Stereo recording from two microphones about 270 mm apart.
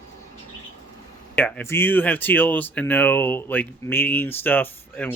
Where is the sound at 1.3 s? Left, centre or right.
Centre.